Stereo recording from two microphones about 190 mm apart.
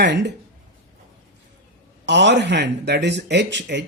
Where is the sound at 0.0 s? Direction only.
60° right (ahead or behind).